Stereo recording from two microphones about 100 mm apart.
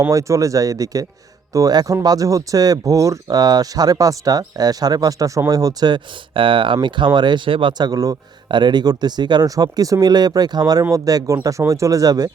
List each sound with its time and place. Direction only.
0.1 s speech: 35° right (ahead or behind)